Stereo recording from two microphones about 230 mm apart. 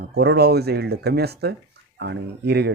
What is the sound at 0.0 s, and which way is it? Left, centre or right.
Speech, right.